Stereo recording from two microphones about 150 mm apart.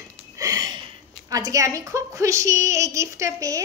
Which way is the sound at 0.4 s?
25° right (ahead or behind).